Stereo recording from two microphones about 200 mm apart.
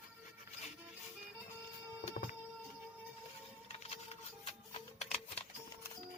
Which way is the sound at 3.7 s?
30° left (ahead or behind).